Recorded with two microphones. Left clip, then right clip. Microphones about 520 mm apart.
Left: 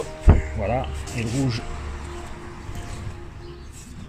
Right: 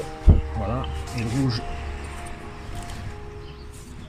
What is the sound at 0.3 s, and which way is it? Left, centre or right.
Music, left.